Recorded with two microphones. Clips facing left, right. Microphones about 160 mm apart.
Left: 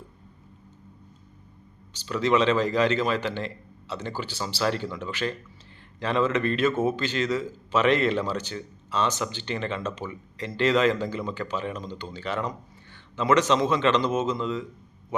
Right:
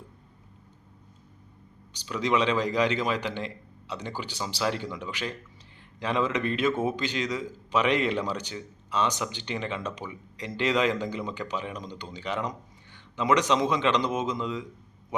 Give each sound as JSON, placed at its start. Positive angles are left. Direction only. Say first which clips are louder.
{"t": 1.9, "sound": "a man's voice", "louder": "left 3 dB", "side_deg": -15}